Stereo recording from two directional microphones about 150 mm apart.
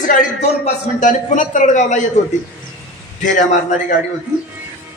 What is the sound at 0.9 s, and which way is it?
A man's voice, 55° left (ahead or behind).